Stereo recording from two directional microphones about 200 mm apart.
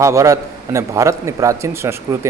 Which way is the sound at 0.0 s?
15° right (ahead or behind).